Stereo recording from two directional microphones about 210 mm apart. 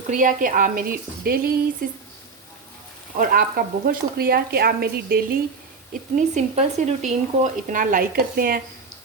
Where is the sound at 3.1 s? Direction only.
40° right (ahead or behind).